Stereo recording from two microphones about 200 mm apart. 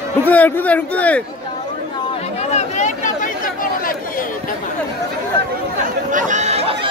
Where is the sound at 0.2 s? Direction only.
10° left (ahead or behind).